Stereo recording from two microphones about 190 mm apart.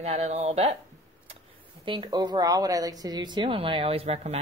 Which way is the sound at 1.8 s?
25° right (ahead or behind).